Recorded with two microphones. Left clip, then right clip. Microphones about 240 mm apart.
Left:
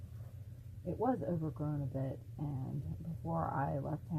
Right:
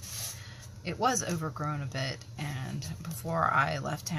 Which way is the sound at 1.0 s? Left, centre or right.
Right.